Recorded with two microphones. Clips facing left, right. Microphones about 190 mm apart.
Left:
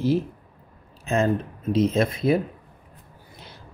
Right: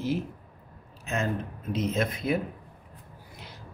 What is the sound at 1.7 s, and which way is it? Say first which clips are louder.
Speech: left 7 dB; 30° left (ahead or behind).